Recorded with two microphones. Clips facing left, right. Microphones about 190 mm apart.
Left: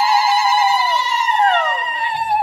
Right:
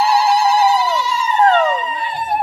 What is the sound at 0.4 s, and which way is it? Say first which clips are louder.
Ringtone: right 3 dB; 45° right (ahead or behind).